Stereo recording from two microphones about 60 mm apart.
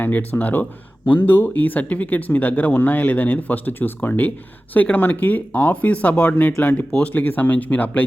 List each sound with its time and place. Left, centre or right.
0.0 s speech: left